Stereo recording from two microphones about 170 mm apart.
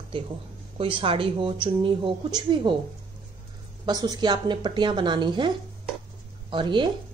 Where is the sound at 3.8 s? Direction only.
25° right (ahead or behind).